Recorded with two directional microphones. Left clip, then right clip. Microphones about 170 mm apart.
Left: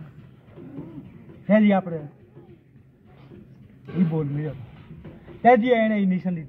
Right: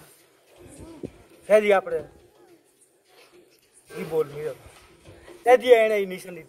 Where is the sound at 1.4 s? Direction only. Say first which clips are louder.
Right 3 dB; 25° right (ahead or behind).